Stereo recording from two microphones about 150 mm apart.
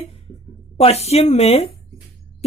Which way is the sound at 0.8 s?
45° left (ahead or behind).